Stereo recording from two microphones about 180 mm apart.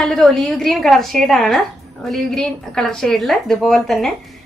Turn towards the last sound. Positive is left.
turn(degrees=0)  # may be behind; listen again after turning